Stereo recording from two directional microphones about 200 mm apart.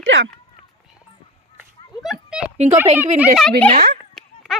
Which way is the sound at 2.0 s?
Centre (ahead or behind).